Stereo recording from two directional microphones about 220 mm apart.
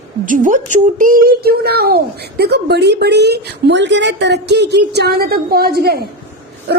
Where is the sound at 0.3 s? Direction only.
35° right (ahead or behind).